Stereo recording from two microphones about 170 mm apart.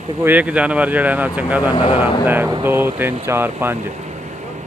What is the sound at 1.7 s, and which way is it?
Speech, 30° left (ahead or behind).